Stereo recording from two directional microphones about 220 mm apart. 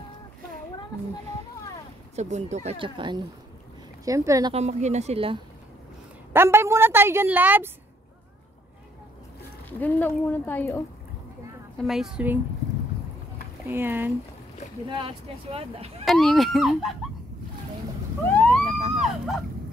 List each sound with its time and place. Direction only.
2.1 s a woman's voice: 30° right (ahead or behind); by 4.6 s 15° right (ahead or behind)
4.6 s speech: 30° right (ahead or behind)
6.3 s a woman's voice: 10° right (ahead or behind)
9.7 s speech: 10° left (ahead or behind)
11.8 s speech: centre (ahead or behind)
13.7 s a woman's voice: 10° right (ahead or behind)
14.9 s speech: 25° right (ahead or behind)
16.1 s speech: centre (ahead or behind)
18.7 s vehicle: 30° right (ahead or behind)